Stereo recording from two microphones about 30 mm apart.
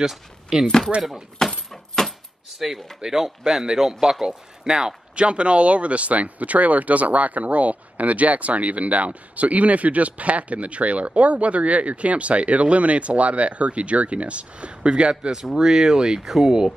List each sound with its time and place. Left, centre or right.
0.5 s speech: right
1.7 s keys jangling: centre
2.6 s speech: centre
3.0 s speech: right
5.1 s speech: right
15.6 s speech: centre